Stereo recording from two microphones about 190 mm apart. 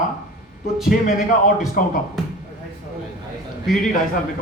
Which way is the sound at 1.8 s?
50° left (ahead or behind).